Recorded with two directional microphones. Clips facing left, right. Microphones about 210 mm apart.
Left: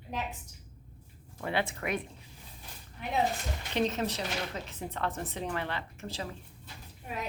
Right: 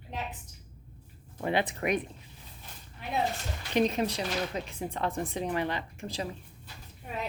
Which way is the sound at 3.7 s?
15° right (ahead or behind).